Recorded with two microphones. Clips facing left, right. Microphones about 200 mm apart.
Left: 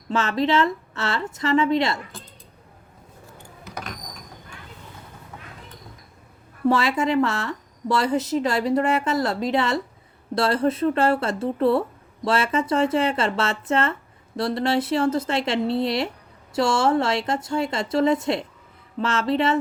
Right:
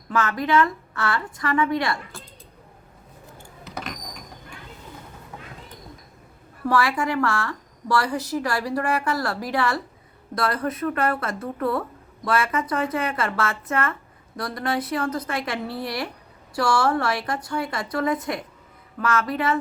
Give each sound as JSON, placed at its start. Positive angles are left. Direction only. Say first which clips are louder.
{"t": 0.1, "sound": "speech", "louder": "left 1 dB", "side_deg": 25}
{"t": 6.7, "sound": "speech", "louder": "left 2 dB", "side_deg": 25}